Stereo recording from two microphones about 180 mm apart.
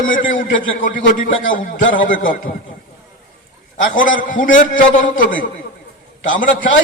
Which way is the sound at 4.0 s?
50° left (ahead or behind).